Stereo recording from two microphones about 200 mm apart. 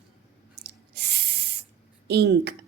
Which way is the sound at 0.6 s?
55° right (ahead or behind).